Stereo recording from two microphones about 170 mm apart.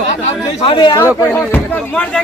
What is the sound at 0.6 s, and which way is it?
Speech, 30° left (ahead or behind).